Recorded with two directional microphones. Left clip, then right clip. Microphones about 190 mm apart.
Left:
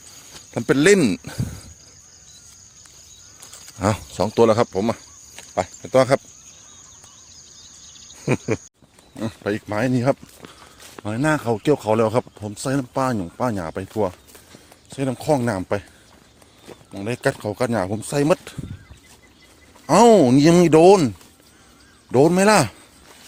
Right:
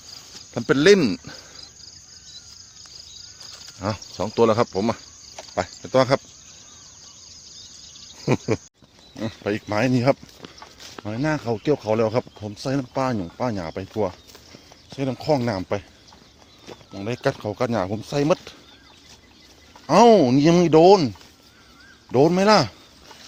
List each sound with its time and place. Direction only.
0.5 s speech: 30° left (ahead or behind)
3.8 s speech: 35° left (ahead or behind); by 6.2 s 15° left (ahead or behind)
8.1 s a sound: 5° left (ahead or behind)
9.2 s speech: 10° left (ahead or behind)
11.0 s speech: 30° left (ahead or behind)
19.9 s speech: 25° left (ahead or behind)
22.1 s speech: 25° left (ahead or behind)